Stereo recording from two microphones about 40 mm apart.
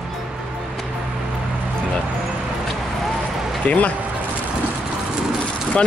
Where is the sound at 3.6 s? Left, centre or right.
Left.